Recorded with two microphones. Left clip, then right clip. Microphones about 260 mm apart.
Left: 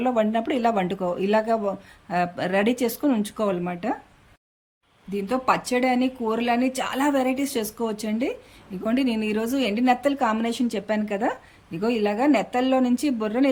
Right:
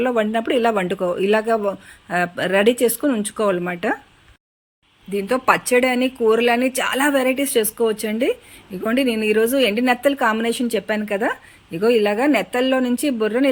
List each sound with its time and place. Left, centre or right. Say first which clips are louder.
0.0 s speech: right 3 dB; centre
5.1 s a woman's voice: right 5 dB; centre